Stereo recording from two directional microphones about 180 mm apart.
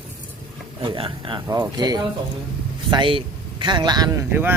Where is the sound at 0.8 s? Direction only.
30° right (ahead or behind).